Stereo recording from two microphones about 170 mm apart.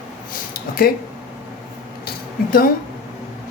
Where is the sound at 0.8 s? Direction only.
60° left (ahead or behind).